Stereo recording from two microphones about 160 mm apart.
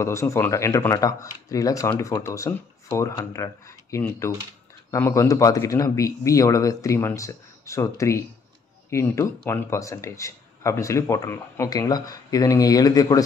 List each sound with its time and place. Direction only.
0.0 s speech: 15° left (ahead or behind)